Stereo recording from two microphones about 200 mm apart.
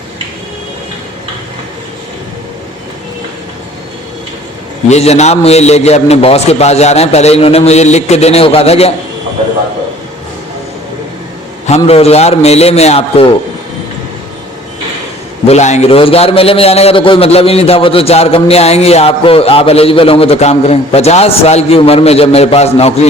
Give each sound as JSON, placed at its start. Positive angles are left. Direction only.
{"t": 4.9, "sound": "a man's voice", "side_deg": 35}
{"t": 11.9, "sound": "a man's voice", "side_deg": 30}
{"t": 15.4, "sound": "a man's voice", "side_deg": 35}